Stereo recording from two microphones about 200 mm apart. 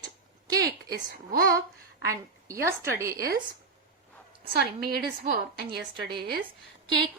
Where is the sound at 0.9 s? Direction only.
45° right (ahead or behind).